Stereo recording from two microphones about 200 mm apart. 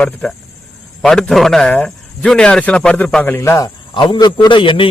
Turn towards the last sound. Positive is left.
turn(degrees=25)  # may be behind; listen again after turning